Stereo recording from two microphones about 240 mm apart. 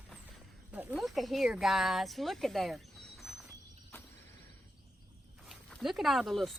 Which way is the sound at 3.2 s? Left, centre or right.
Centre.